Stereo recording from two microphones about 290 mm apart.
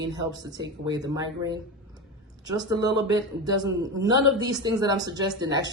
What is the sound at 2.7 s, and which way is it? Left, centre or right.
Speech, centre.